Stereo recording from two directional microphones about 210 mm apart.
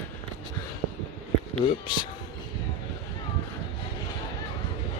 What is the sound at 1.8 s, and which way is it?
Speech, 20° left (ahead or behind).